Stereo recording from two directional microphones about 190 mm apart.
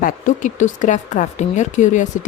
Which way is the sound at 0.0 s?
40° left (ahead or behind).